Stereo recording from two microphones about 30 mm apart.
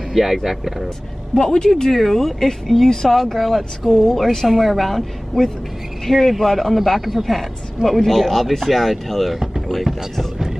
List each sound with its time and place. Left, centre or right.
0.1 s speech: centre
1.4 s speech: left
1.9 s speech: centre
3.3 s speech: centre
9.9 s speech: centre